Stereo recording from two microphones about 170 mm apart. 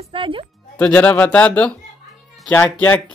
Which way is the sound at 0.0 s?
30° right (ahead or behind).